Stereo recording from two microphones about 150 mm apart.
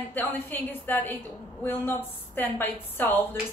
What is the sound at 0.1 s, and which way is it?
A woman's voice, 15° left (ahead or behind).